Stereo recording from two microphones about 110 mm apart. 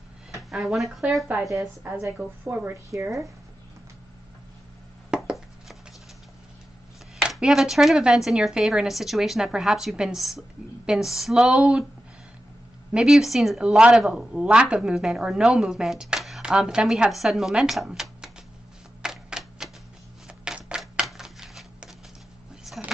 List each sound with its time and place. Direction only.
0.3 s speech: centre (ahead or behind)
2.1 s a woman's voice: 15° right (ahead or behind)
2.9 s speech: 30° right (ahead or behind)
5.1 s chopping: 5° right (ahead or behind)
7.2 s speech: 5° right (ahead or behind)
12.9 s speech: 5° right (ahead or behind)
19.0 s typewriter: 5° right (ahead or behind)
22.7 s a sound: 5° right (ahead or behind)